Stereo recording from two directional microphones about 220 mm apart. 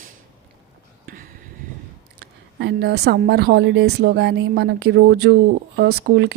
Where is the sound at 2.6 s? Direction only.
50° right (ahead or behind).